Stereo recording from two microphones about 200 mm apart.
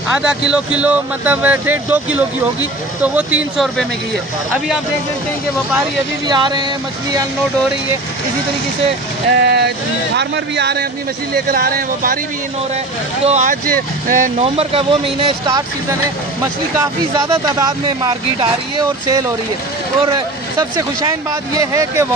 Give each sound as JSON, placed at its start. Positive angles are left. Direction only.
{"t": 0.1, "sound": "speech", "side_deg": -5}
{"t": 6.2, "sound": "speech", "side_deg": -20}
{"t": 9.4, "sound": "speech", "side_deg": -55}
{"t": 13.2, "sound": "speech", "side_deg": -35}
{"t": 16.7, "sound": "speech", "side_deg": -15}